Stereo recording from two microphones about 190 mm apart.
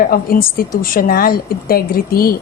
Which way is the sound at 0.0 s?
50° left (ahead or behind).